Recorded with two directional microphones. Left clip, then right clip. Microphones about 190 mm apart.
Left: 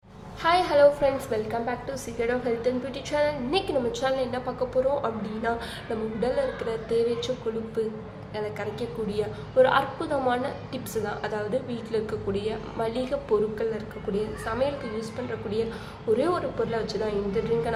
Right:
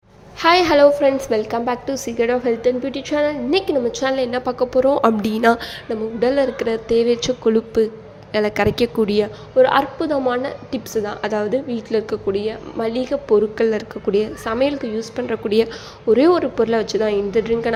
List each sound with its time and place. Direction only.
0.4 s a woman's voice: 45° right (ahead or behind)
6.1 s speech: 45° right (ahead or behind)
9.6 s a woman's voice: 30° right (ahead or behind)
13.7 s speech: 45° right (ahead or behind)
16.1 s speech: 40° right (ahead or behind)